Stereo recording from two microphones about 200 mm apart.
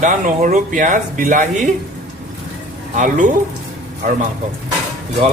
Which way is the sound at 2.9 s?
40° right (ahead or behind).